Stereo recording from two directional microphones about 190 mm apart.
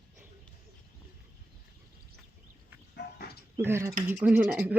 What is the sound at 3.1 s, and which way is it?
Dog, 55° left (ahead or behind).